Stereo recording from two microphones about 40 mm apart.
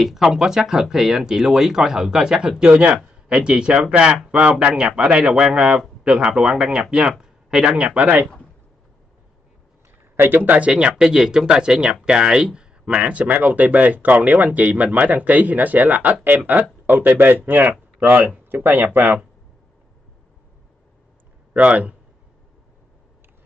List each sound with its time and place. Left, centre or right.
0.0 s speech: centre; by 8.1 s right
10.1 s speech: right
10.4 s speech: right
10.9 s speech: centre; by 19.2 s right
21.5 s speech: right